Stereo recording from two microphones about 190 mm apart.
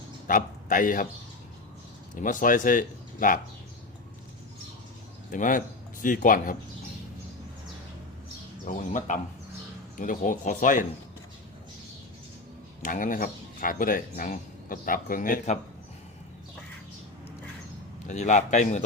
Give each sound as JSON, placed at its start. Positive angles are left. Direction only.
{"t": 0.3, "sound": "a man's voice", "side_deg": 45}
{"t": 2.1, "sound": "speech", "side_deg": 45}
{"t": 5.3, "sound": "speech", "side_deg": 45}
{"t": 8.6, "sound": "speech", "side_deg": 45}
{"t": 12.8, "sound": "speech", "side_deg": 45}
{"t": 18.1, "sound": "a man's voice", "side_deg": 40}